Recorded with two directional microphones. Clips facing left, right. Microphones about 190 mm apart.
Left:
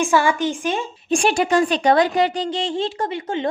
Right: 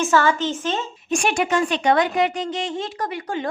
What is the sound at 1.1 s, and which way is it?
A woman's voice, 30° left (ahead or behind).